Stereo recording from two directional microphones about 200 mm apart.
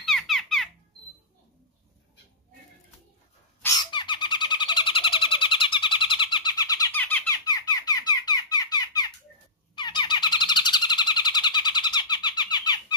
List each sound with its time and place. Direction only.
0.0 s squeak: centre (ahead or behind)
3.6 s a sound: 20° left (ahead or behind)
7.0 s squeak: 10° left (ahead or behind)
9.8 s music: 20° left (ahead or behind)